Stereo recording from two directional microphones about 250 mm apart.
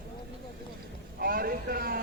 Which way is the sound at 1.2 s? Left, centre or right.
Right.